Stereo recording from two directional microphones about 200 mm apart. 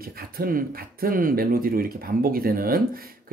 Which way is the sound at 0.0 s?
45° right (ahead or behind).